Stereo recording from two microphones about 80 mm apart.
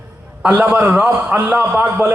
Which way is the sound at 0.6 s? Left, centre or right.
Right.